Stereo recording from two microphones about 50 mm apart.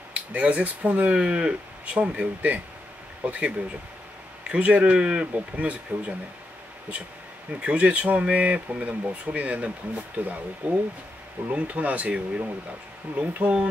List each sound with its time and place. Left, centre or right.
0.1 s speech: right
4.5 s speech: right
7.6 s speech: right